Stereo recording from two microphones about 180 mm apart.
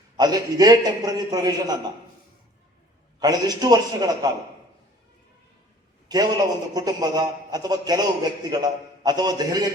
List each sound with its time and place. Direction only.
0.2 s a man's voice: 20° right (ahead or behind)
3.2 s a man's voice: 20° right (ahead or behind)
6.1 s a man's voice: 20° right (ahead or behind)